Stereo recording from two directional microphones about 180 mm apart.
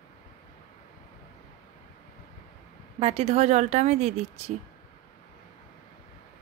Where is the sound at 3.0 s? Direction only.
35° right (ahead or behind).